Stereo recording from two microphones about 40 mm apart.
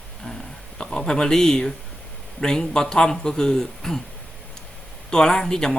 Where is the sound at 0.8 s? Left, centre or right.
Centre.